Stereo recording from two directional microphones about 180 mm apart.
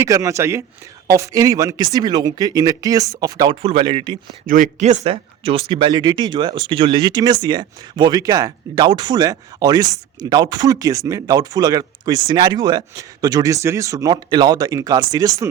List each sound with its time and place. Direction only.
0.0 s a man's voice: 15° right (ahead or behind)
4.4 s speech: 50° right (ahead or behind); by 15.4 s 20° right (ahead or behind)